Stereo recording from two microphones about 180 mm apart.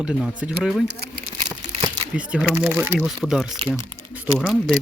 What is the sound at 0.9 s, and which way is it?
Speech, 65° right (ahead or behind).